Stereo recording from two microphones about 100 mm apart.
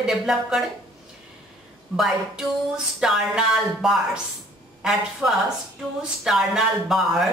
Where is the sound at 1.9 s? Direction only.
5° right (ahead or behind).